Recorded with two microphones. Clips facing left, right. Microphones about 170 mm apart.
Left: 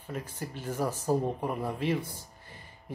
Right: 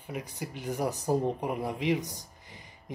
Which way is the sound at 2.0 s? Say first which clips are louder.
Right 1 dB; 15° right (ahead or behind).